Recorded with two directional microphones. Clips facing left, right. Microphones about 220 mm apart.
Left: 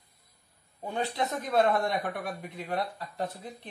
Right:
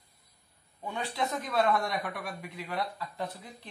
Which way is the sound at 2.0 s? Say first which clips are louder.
Left 3 dB; 50° left (ahead or behind).